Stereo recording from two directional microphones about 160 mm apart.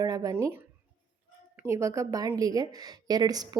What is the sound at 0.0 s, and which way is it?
A woman's voice, 25° right (ahead or behind).